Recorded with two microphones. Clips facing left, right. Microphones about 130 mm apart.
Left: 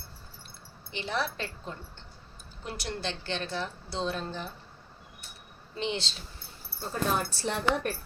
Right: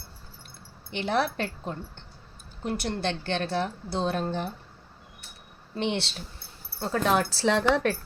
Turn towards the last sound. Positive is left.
turn(degrees=-90)